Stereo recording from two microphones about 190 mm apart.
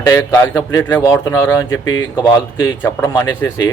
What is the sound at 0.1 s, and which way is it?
A man's voice, 15° left (ahead or behind).